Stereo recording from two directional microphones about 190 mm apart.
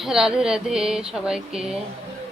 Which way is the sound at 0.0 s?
Centre (ahead or behind).